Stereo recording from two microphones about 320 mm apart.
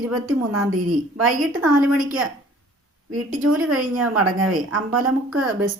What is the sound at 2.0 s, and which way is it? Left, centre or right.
Speech, centre.